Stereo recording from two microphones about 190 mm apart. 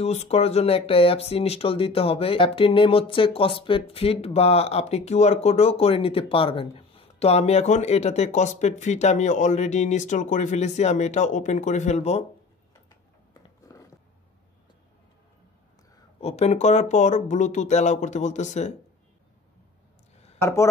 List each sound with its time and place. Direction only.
0.0 s speech: 35° left (ahead or behind)
13.3 s a sound: 20° left (ahead or behind)
16.2 s speech: 35° left (ahead or behind)
20.3 s speech: 15° left (ahead or behind)